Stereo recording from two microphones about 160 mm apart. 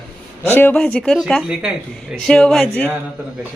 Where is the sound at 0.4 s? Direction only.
15° left (ahead or behind).